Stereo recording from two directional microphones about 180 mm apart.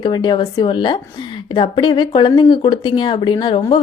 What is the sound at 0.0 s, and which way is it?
Speech, 25° left (ahead or behind).